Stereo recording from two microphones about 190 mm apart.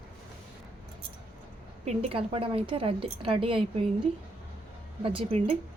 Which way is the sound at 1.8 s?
30° right (ahead or behind).